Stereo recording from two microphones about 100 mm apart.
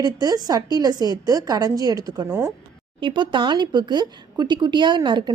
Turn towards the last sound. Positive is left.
turn(degrees=-50)  # may be behind; listen again after turning